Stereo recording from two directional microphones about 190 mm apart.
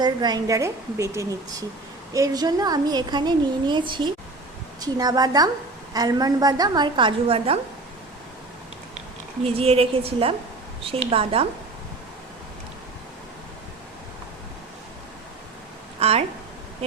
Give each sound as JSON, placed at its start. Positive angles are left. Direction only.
{"t": 0.0, "sound": "a woman's voice", "side_deg": -20}
{"t": 9.4, "sound": "a woman's voice", "side_deg": -30}
{"t": 16.0, "sound": "a sound", "side_deg": -30}